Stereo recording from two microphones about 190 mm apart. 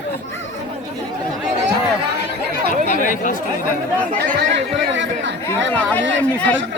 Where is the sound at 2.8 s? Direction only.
40° left (ahead or behind).